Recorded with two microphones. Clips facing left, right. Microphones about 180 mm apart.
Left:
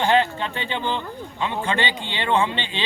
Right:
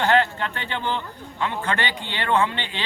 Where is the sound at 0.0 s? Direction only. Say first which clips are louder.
Left 1 dB; 15° left (ahead or behind).